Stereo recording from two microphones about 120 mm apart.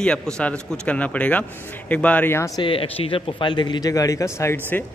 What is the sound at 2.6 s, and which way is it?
Speech, 50° left (ahead or behind).